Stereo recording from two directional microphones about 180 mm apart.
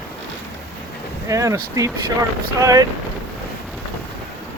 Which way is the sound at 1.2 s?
15° right (ahead or behind).